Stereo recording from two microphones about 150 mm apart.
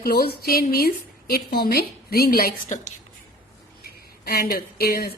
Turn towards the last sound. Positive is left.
turn(degrees=90)